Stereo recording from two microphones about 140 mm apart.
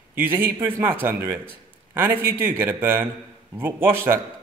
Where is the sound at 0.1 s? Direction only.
15° right (ahead or behind).